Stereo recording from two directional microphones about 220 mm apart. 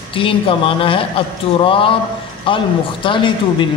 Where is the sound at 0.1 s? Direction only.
25° left (ahead or behind).